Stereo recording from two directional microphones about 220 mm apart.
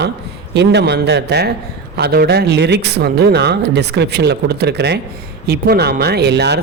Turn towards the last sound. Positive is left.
turn(degrees=-50)  # may be behind; listen again after turning